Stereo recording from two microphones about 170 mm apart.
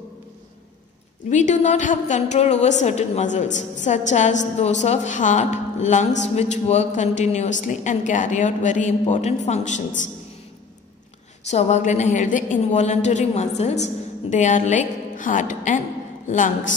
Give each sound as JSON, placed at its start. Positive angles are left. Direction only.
{"t": 1.3, "sound": "a woman's voice", "side_deg": 45}
{"t": 11.4, "sound": "a woman's voice", "side_deg": 40}